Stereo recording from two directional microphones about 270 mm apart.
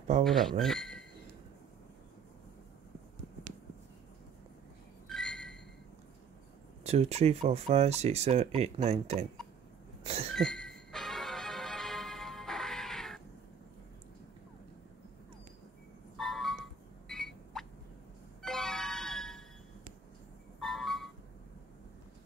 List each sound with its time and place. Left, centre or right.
0.2 s speech: centre
5.0 s a sound: centre
6.8 s speech: right
10.3 s music: centre
16.2 s a sound: centre
18.4 s music: centre
20.6 s vehicle: centre